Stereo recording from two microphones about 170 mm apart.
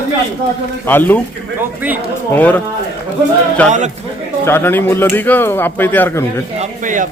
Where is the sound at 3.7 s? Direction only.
45° right (ahead or behind).